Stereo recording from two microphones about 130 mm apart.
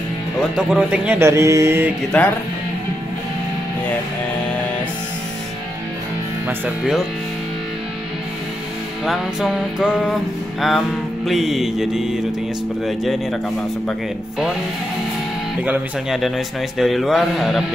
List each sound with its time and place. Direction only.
0.6 s speech: 5° right (ahead or behind)
1.2 s mantra: 20° right (ahead or behind)
2.1 s speech: 5° left (ahead or behind)
9.0 s music: centre (ahead or behind)
15.6 s speech: 5° right (ahead or behind)
16.7 s music: centre (ahead or behind)